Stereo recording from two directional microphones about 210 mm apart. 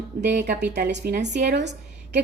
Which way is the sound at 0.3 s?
50° right (ahead or behind).